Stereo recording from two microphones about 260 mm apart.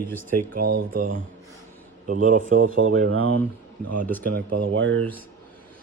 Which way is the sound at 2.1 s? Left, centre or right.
Right.